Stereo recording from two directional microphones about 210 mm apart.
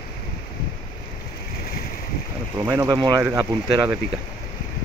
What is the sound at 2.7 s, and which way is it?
Speech, 15° right (ahead or behind).